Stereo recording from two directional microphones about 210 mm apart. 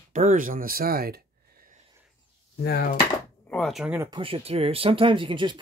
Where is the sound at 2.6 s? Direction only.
45° left (ahead or behind).